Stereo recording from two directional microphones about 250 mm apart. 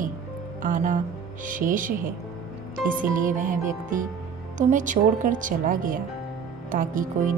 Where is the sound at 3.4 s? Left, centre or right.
Right.